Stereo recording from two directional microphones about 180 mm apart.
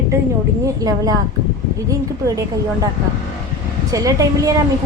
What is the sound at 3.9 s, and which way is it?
Speech, 20° right (ahead or behind).